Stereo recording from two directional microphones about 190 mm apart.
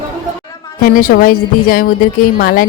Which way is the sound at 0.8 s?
45° left (ahead or behind).